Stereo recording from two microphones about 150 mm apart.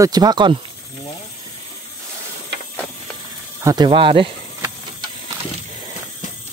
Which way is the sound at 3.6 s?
30° right (ahead or behind).